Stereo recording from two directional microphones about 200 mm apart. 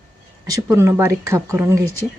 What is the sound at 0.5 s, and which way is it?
Speech, 15° right (ahead or behind).